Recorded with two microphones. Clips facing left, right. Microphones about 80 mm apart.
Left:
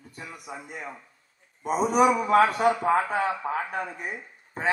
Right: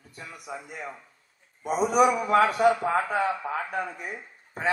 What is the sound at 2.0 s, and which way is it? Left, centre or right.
Speech, left.